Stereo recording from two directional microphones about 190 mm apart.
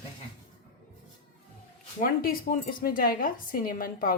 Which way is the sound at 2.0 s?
50° left (ahead or behind).